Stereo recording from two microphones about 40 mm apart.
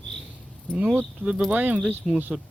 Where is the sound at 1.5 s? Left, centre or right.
Right.